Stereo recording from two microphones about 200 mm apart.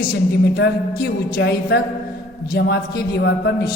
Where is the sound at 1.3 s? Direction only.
55° left (ahead or behind).